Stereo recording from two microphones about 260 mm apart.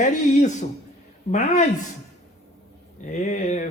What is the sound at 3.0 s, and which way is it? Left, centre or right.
Speech, left.